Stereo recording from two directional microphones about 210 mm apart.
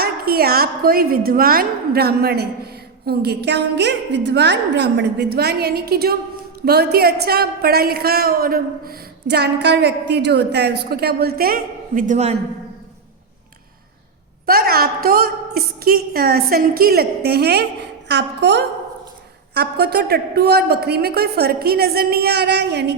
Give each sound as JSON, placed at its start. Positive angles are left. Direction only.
{"t": 0.0, "sound": "a woman's voice", "side_deg": -45}
{"t": 14.4, "sound": "a woman's voice", "side_deg": -45}